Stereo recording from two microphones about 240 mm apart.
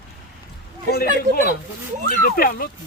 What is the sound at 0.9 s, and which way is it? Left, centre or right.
Speech, left.